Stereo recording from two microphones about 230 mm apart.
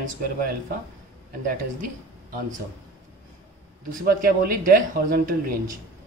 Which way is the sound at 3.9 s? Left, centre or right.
Right.